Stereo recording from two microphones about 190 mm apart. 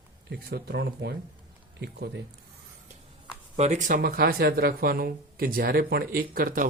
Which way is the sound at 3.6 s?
40° right (ahead or behind).